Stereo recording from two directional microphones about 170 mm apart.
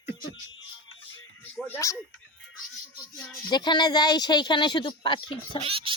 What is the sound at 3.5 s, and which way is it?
A woman's voice, 25° left (ahead or behind).